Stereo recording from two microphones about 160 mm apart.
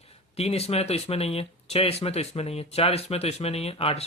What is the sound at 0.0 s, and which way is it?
Speech, 40° left (ahead or behind).